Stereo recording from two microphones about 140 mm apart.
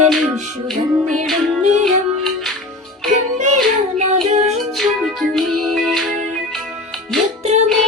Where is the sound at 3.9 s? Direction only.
55° right (ahead or behind).